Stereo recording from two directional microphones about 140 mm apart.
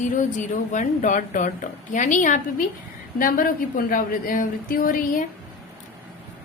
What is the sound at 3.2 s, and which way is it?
A woman's voice, 85° left.